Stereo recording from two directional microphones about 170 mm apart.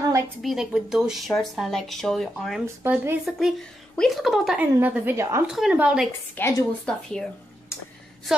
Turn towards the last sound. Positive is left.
turn(degrees=15)  # may be behind; listen again after turning